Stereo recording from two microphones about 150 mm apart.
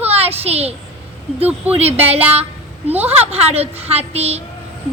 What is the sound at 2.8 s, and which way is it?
Speech, 10° right (ahead or behind).